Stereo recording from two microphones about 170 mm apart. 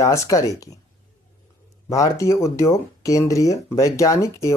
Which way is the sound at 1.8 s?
20° left (ahead or behind).